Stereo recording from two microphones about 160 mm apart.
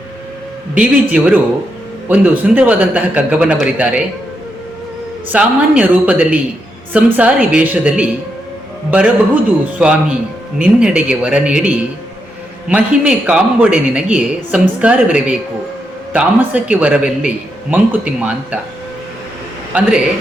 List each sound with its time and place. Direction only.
0.7 s a man's voice: 10° right (ahead or behind)
5.3 s a man's voice: 10° right (ahead or behind)
16.1 s a man's voice: 10° right (ahead or behind)
19.7 s a man's voice: 10° right (ahead or behind)